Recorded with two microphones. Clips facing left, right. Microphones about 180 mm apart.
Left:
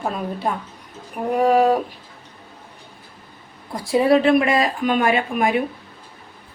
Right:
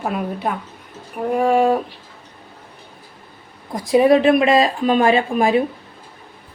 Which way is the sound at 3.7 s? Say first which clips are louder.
Right 3 dB; 20° right (ahead or behind).